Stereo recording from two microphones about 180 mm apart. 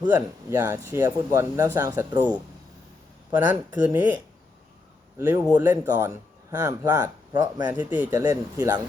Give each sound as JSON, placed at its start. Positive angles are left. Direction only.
{"t": 0.5, "sound": "speech", "side_deg": -15}
{"t": 3.3, "sound": "speech", "side_deg": -10}
{"t": 5.2, "sound": "speech", "side_deg": -10}